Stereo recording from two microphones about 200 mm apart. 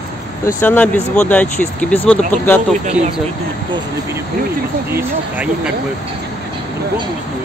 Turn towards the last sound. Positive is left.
turn(degrees=-10)  # may be behind; listen again after turning